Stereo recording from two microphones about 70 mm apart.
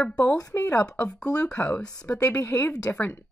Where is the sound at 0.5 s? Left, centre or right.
Left.